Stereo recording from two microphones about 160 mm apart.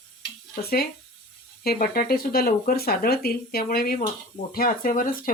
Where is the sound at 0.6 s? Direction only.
75° left (ahead or behind).